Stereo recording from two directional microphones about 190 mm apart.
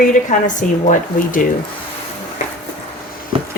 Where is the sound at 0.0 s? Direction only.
40° left (ahead or behind).